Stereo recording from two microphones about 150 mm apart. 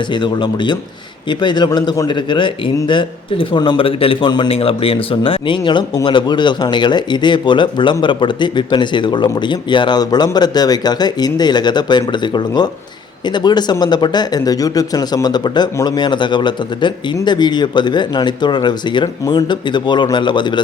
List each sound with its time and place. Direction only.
0.1 s a man's voice: 30° left (ahead or behind)